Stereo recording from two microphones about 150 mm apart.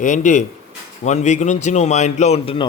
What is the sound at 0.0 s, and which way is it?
Speech, 55° left (ahead or behind).